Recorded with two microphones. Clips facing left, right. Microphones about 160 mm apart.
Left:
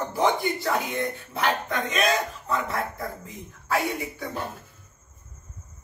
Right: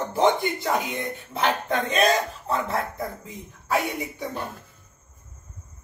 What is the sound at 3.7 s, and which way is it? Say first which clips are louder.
Speech: right 1 dB; 20° right (ahead or behind).